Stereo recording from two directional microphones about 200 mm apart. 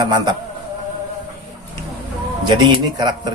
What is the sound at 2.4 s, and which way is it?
Speech, 20° right (ahead or behind).